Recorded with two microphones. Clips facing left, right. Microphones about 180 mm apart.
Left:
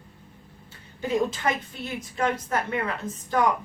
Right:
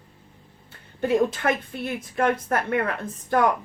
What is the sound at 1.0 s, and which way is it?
A woman's voice, 55° right (ahead or behind).